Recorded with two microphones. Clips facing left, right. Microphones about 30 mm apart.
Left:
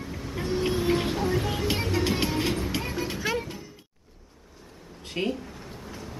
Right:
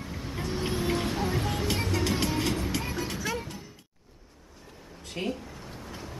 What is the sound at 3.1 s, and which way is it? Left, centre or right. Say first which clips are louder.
Music: left 4 dB; left.